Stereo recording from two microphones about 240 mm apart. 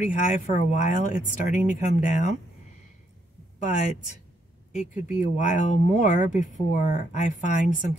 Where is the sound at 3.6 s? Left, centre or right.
Left.